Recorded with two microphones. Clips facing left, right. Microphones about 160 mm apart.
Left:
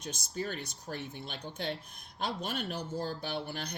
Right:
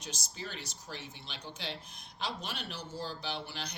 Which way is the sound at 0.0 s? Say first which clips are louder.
Left 6 dB; 50° left (ahead or behind).